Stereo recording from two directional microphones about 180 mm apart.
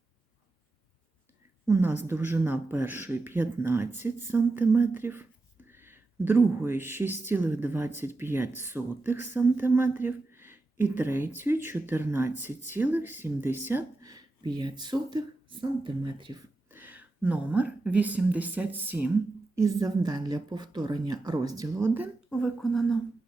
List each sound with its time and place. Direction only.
1.6 s speech: 15° right (ahead or behind)
16.7 s a woman's voice: 10° right (ahead or behind)
19.5 s speech: 20° right (ahead or behind); by 23.0 s centre (ahead or behind)